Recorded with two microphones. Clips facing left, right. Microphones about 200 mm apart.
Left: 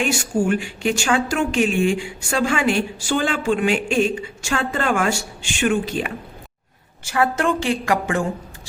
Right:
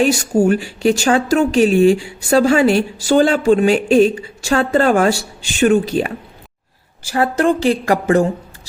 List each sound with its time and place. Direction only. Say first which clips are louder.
0.0 s a woman's voice: right 7 dB; 35° right (ahead or behind)